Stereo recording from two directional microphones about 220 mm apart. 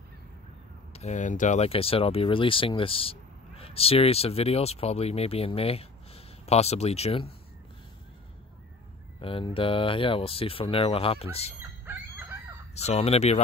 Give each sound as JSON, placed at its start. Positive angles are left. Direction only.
{"t": 0.9, "sound": "speech", "side_deg": 30}
{"t": 9.2, "sound": "speech", "side_deg": 25}
{"t": 12.7, "sound": "speech", "side_deg": 30}